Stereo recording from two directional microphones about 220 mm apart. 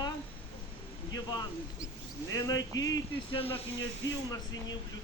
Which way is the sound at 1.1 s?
20° left (ahead or behind).